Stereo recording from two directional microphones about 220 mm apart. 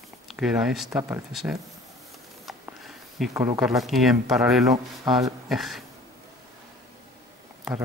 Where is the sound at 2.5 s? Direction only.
Centre (ahead or behind).